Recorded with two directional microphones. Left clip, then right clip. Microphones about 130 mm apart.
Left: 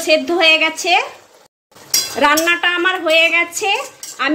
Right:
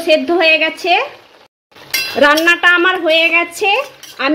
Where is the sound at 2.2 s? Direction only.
90° right.